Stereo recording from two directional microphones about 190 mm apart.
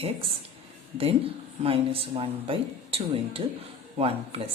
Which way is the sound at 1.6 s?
30° right (ahead or behind).